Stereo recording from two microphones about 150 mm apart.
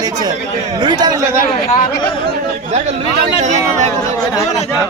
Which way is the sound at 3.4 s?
50° right (ahead or behind).